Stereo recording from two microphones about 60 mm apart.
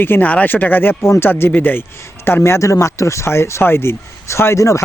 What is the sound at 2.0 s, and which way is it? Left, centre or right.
Speech, left.